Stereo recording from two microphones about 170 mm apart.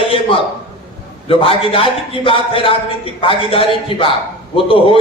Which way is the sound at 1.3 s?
30° left (ahead or behind).